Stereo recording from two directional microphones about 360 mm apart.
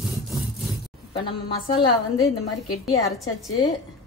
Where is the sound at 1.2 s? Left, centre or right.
Centre.